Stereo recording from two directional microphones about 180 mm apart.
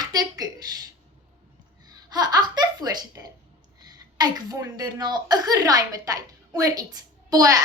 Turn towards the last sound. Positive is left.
turn(degrees=-20)  # may be behind; listen again after turning